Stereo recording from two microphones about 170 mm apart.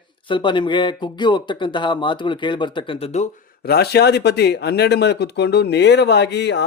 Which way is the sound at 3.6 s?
70° left (ahead or behind).